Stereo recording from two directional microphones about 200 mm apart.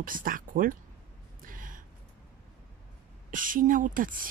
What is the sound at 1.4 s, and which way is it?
Gasp, 45° right (ahead or behind).